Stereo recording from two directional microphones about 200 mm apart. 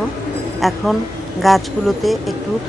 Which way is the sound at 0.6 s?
Centre (ahead or behind).